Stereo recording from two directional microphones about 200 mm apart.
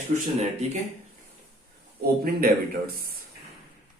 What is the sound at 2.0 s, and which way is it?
Speech, 50° right (ahead or behind).